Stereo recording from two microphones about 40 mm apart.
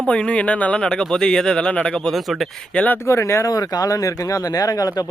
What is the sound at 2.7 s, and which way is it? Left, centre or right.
Speech, left.